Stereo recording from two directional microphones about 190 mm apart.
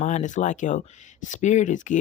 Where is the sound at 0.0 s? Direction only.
40° left (ahead or behind).